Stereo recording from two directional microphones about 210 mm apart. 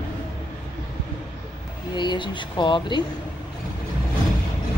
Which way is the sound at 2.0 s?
20° left (ahead or behind).